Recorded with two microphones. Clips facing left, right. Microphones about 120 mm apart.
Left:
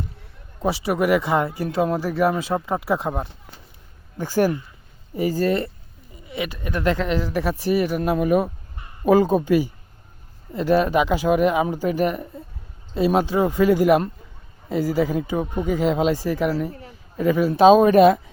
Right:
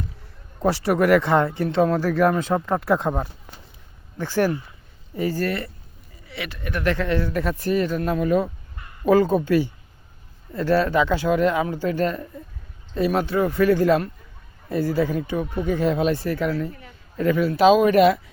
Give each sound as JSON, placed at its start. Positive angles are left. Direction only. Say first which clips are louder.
{"t": 0.6, "sound": "speech", "louder": "right 2 dB", "side_deg": 5}
{"t": 17.7, "sound": "speech", "louder": "left 3 dB", "side_deg": 35}